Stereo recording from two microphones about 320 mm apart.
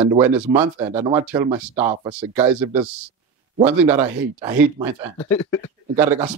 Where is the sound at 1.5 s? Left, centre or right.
Centre.